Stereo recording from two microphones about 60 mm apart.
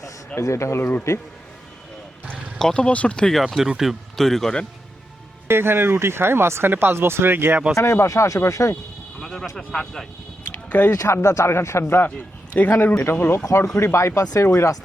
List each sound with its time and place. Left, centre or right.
0.4 s speech: left
0.8 s speech: left
2.3 s speech: centre
3.3 s a man's voice: centre
5.5 s speech: right
7.8 s speech: left
9.2 s speech: centre
10.5 s a sound: left
10.9 s speech: left
12.6 s speech: left
13.0 s speech: left
13.7 s speech: left
14.2 s speech: left
14.4 s speech: left